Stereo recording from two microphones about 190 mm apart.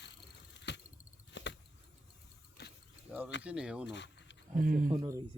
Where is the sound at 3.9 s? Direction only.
70° left (ahead or behind).